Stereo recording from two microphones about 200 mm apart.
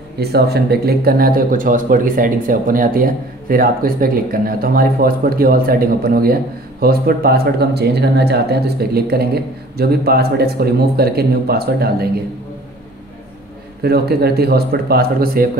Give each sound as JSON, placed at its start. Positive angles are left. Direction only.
{"t": 0.2, "sound": "speech", "side_deg": -55}
{"t": 13.8, "sound": "speech", "side_deg": -50}